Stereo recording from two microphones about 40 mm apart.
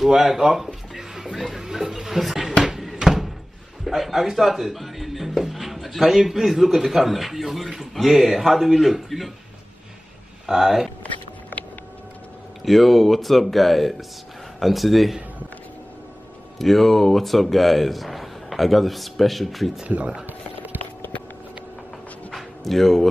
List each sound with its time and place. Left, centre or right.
0.0 s speech: centre
0.4 s speech: centre
0.9 s music: centre
1.3 s speech: centre
1.6 s a sound: centre
3.0 s door: centre
3.8 s speech: centre
10.4 s speech: centre
12.6 s speech: centre
16.5 s speech: centre
20.2 s a sound: right
22.3 s a sound: centre